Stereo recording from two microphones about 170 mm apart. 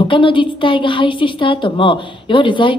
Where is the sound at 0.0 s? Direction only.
30° left (ahead or behind).